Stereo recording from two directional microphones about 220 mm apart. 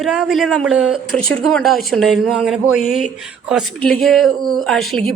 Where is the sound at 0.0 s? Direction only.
Centre (ahead or behind).